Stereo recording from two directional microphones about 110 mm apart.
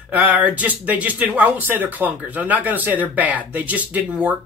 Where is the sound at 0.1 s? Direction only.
15° right (ahead or behind).